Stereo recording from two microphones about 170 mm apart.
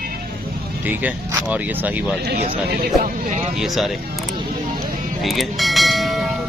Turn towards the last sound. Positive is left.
turn(degrees=0)  # may be behind; listen again after turning